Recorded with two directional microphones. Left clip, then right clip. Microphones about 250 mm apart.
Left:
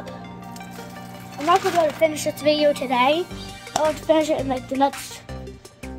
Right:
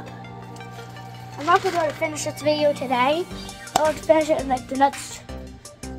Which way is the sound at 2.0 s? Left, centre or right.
Centre.